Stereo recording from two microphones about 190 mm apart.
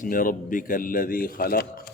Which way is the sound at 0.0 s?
45° left (ahead or behind).